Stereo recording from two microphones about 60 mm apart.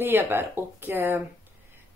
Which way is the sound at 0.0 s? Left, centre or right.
Right.